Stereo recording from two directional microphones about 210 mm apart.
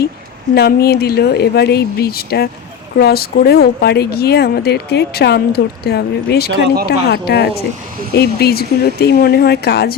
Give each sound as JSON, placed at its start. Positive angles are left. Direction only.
{"t": 0.5, "sound": "speech", "side_deg": 50}